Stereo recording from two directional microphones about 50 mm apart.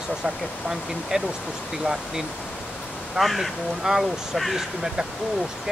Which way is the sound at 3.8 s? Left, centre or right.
Centre.